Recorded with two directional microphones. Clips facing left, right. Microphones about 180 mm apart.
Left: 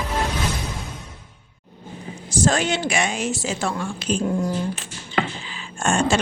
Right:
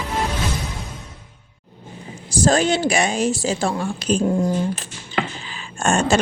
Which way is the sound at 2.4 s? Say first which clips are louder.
Right 4 dB; 35° right (ahead or behind).